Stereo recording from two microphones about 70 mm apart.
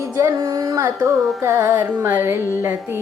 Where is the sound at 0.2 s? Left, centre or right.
Right.